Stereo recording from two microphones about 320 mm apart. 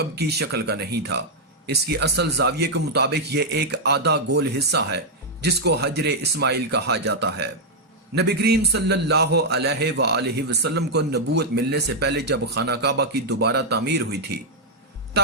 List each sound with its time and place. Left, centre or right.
0.0 s a man's voice: right